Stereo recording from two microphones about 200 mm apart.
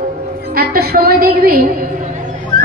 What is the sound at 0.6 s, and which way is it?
Speech, 50° right (ahead or behind).